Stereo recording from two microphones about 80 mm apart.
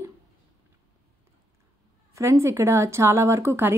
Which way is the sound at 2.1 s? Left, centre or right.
Right.